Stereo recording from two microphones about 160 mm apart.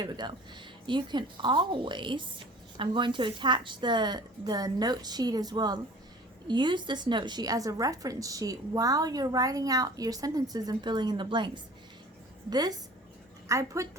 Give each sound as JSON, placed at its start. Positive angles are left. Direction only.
{"t": 0.0, "sound": "speech", "side_deg": -25}